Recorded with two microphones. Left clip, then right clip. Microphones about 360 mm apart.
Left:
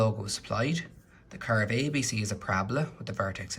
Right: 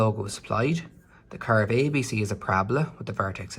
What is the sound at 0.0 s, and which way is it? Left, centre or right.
Speech, centre.